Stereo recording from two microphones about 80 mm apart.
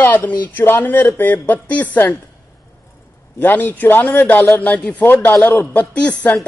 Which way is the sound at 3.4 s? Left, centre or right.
Left.